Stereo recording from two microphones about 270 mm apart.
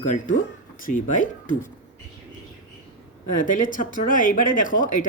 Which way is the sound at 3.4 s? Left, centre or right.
Left.